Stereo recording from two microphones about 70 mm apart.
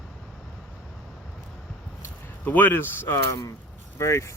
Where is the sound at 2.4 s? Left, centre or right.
Left.